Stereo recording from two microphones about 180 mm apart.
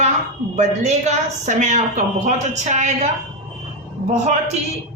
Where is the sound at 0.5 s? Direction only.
40° right (ahead or behind).